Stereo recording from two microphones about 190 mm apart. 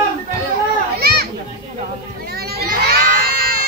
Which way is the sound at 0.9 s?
55° right (ahead or behind).